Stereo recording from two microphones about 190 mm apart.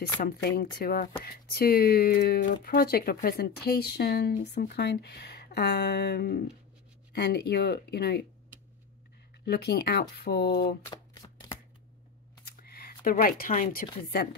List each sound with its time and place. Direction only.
0.2 s speech: 55° left (ahead or behind)
9.5 s speech: 60° left (ahead or behind)
10.9 s shuffling cards: 20° left (ahead or behind)
12.4 s a sound: 50° left (ahead or behind)